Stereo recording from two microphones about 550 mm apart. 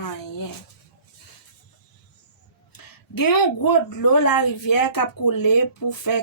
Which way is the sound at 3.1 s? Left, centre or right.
Left.